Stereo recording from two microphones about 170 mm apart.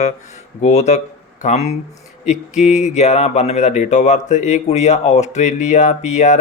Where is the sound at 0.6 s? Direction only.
40° left (ahead or behind).